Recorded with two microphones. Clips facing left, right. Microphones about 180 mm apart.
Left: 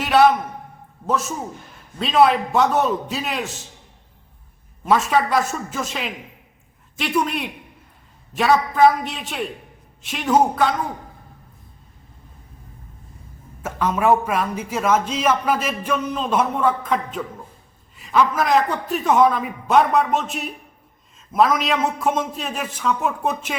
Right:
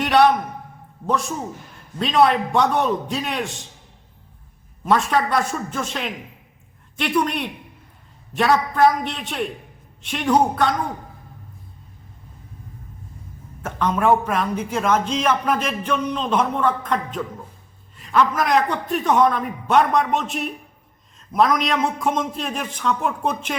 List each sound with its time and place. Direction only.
0.0 s a sound: 5° left (ahead or behind)
1.0 s a man's voice: 5° left (ahead or behind)
4.9 s a man's voice: 5° left (ahead or behind)
13.6 s a man's voice: 5° left (ahead or behind)